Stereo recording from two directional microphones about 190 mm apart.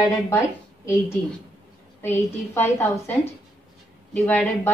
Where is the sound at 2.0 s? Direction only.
10° left (ahead or behind).